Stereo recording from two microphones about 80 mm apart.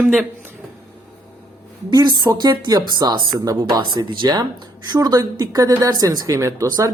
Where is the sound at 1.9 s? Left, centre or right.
Right.